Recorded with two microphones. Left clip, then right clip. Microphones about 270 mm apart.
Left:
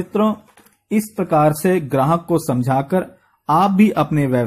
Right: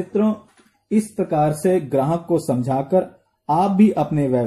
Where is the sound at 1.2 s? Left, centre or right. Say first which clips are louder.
Left 4 dB; left.